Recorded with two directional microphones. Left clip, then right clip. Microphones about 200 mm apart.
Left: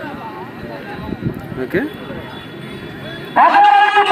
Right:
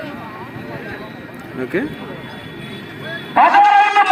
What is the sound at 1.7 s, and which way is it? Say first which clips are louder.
Speech: left 2 dB; 5° right (ahead or behind).